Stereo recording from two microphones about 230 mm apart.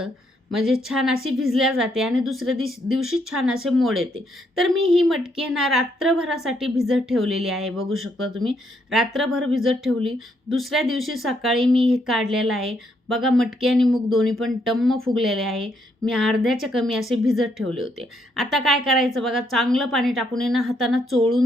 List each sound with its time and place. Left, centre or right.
0.5 s speech: centre
2.9 s speech: right
3.3 s speech: centre
7.9 s speech: right
8.4 s speech: centre